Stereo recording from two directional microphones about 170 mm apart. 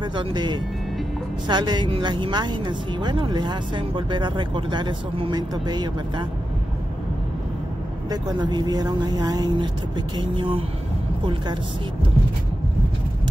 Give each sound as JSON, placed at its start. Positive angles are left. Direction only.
{"t": 0.0, "sound": "a woman's voice", "side_deg": -25}
{"t": 8.1, "sound": "a woman's voice", "side_deg": -25}